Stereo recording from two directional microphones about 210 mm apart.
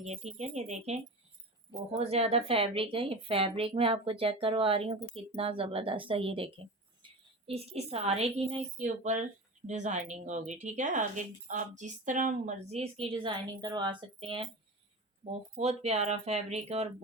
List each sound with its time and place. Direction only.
0.0 s speech: 30° right (ahead or behind)